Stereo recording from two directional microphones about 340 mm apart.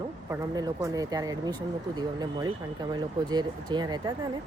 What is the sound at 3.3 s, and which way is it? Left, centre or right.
Speech, centre.